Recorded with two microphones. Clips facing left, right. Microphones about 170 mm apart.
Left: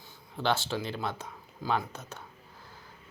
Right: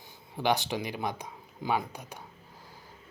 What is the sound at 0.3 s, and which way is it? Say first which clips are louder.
Speech: right 1 dB; 15° right (ahead or behind).